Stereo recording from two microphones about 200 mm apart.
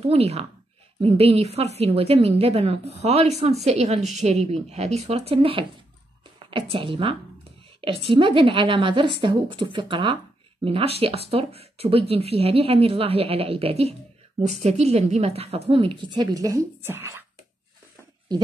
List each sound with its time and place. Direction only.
0.1 s a woman's voice: 30° right (ahead or behind); by 17.2 s 10° right (ahead or behind)